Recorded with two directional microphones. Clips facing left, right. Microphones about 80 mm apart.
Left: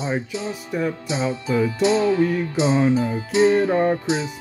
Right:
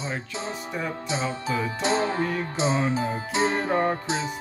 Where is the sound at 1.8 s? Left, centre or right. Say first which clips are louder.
Left 6 dB; right.